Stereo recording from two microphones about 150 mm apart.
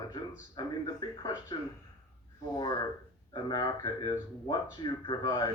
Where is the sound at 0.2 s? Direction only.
30° left (ahead or behind).